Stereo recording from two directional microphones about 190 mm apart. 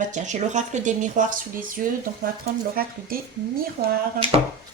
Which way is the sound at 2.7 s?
50° right (ahead or behind).